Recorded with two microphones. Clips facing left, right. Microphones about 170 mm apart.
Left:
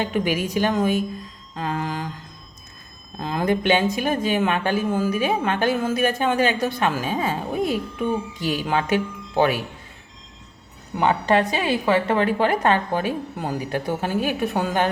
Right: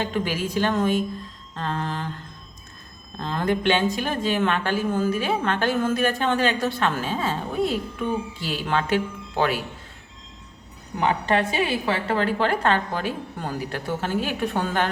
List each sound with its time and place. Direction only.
0.0 s a woman's voice: 15° left (ahead or behind)
3.2 s a woman's voice: 10° left (ahead or behind)
11.1 s a woman's voice: 25° left (ahead or behind)